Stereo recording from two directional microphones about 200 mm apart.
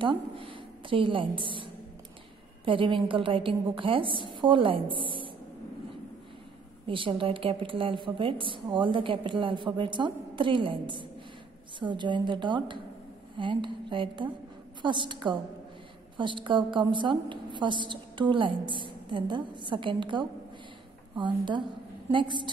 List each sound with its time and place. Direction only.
0.0 s a woman's voice: 25° right (ahead or behind)
6.9 s a woman's voice: 25° right (ahead or behind)